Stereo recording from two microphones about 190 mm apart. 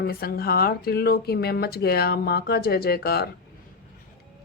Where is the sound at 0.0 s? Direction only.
55° left (ahead or behind).